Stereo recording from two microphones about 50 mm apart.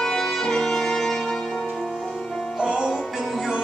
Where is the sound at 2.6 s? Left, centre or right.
Centre.